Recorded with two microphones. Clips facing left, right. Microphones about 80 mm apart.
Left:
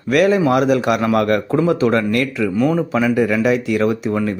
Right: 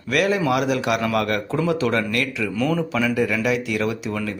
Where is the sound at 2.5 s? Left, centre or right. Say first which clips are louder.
Left 5 dB; left.